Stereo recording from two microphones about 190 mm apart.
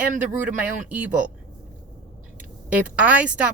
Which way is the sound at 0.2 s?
10° right (ahead or behind).